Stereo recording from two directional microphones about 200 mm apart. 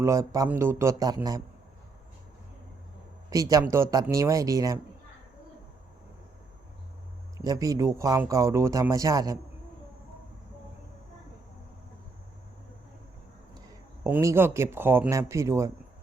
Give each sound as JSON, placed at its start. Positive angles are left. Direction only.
{"t": 0.0, "sound": "speech", "side_deg": -15}
{"t": 3.2, "sound": "speech", "side_deg": -15}
{"t": 7.3, "sound": "speech", "side_deg": -15}
{"t": 14.0, "sound": "speech", "side_deg": -15}